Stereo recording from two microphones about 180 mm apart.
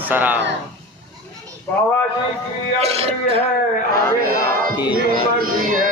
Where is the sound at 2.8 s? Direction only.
35° right (ahead or behind).